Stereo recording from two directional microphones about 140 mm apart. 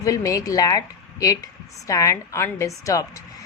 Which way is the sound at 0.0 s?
25° left (ahead or behind).